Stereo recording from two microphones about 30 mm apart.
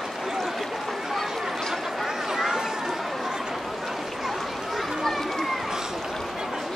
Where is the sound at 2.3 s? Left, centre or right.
Centre.